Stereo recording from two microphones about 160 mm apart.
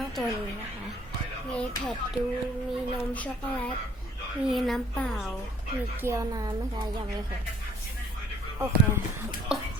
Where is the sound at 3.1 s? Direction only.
10° left (ahead or behind).